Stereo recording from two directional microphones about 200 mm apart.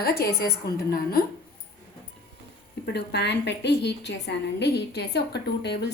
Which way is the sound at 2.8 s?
55° left (ahead or behind).